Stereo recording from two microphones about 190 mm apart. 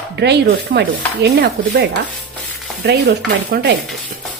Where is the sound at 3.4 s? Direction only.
55° right (ahead or behind).